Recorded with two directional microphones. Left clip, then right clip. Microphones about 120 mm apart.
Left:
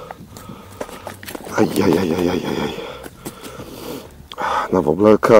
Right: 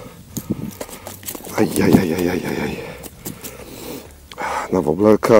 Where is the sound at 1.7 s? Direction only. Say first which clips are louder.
Even; 25° right (ahead or behind).